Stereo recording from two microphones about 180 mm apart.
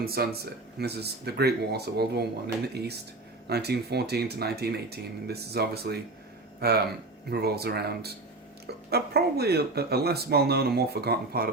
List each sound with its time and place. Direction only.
0.0 s speech: 60° right (ahead or behind)